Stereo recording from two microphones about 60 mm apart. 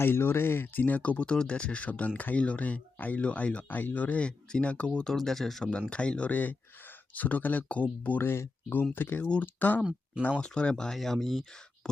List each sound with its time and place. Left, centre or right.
0.0 s speech: left; by 5.1 s centre
5.1 s speech: centre
5.9 s speech: centre
8.2 s speech: left
10.4 s speech: centre